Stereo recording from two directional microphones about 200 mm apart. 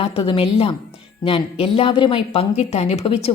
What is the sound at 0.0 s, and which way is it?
A woman's voice, 30° left (ahead or behind).